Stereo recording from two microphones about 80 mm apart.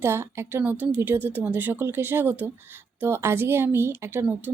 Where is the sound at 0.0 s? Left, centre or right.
Right.